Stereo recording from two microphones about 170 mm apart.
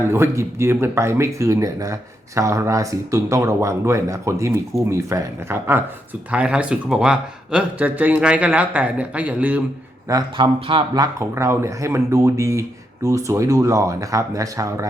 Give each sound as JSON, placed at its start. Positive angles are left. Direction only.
{"t": 0.1, "sound": "speech", "side_deg": -15}
{"t": 10.1, "sound": "speech", "side_deg": -25}